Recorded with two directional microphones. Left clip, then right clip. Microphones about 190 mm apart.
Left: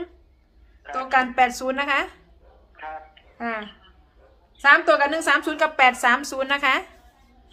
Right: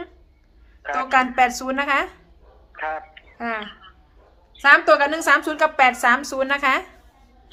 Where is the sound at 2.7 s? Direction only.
60° right (ahead or behind).